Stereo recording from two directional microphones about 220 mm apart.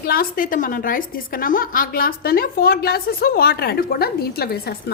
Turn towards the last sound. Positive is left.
turn(degrees=45)  # may be behind; listen again after turning